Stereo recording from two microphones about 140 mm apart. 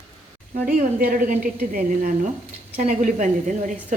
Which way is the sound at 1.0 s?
85° right.